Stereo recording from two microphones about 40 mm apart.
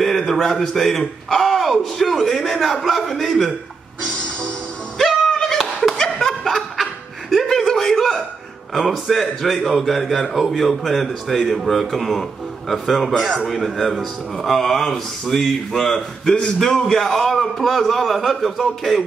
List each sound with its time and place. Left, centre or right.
0.0 s a man's voice: centre
4.9 s music: centre
5.9 s chuckle: centre
6.8 s a sound: centre
8.8 s a man's voice: centre